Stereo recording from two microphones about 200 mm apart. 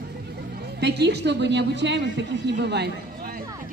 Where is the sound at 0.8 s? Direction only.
55° right (ahead or behind).